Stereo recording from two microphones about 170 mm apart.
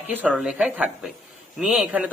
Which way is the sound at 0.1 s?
10° right (ahead or behind).